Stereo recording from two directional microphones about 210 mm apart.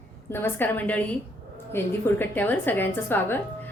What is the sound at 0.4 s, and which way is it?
A woman's voice, 10° left (ahead or behind).